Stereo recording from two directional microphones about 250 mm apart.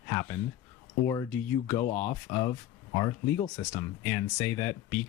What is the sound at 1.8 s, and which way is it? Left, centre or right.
Speech, left.